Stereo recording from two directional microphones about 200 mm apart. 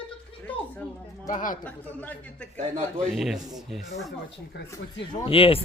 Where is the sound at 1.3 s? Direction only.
40° left (ahead or behind).